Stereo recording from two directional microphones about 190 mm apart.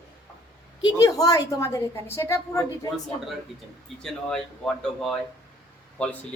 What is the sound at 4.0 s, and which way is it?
Speech, centre (ahead or behind).